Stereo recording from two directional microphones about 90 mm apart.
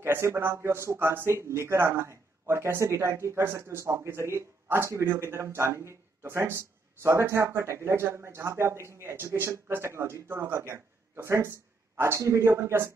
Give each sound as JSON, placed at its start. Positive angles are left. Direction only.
{"t": 0.0, "sound": "a man's voice", "side_deg": -30}